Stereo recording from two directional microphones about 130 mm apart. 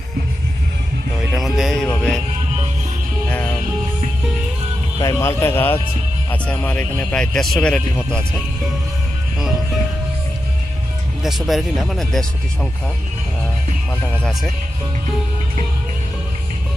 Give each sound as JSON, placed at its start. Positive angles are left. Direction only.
{"t": 1.6, "sound": "music", "side_deg": 5}
{"t": 4.9, "sound": "a man's voice", "side_deg": 20}
{"t": 11.2, "sound": "speech", "side_deg": 0}